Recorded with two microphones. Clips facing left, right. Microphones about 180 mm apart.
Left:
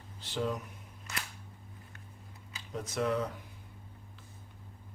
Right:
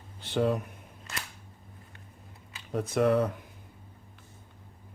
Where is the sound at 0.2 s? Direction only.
60° right (ahead or behind).